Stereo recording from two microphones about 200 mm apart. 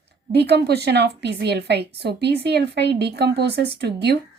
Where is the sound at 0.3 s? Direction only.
55° right (ahead or behind).